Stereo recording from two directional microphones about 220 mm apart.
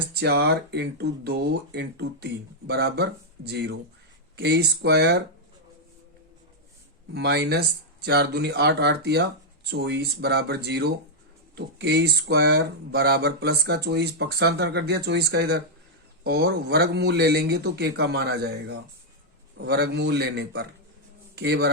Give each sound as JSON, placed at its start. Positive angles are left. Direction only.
{"t": 0.2, "sound": "speech", "side_deg": -50}
{"t": 7.1, "sound": "a man's voice", "side_deg": -50}